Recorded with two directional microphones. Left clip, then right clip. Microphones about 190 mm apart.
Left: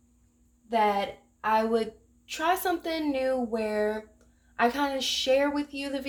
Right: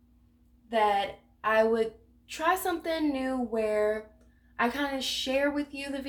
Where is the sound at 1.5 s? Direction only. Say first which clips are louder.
Right 1 dB; 45° left (ahead or behind).